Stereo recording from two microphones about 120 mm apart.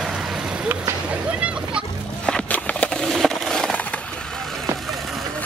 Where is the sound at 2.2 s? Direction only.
10° left (ahead or behind).